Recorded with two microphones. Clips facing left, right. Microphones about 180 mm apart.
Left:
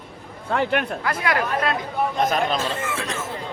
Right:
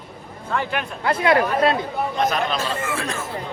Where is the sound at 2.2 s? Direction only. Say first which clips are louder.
Even; 45° left (ahead or behind).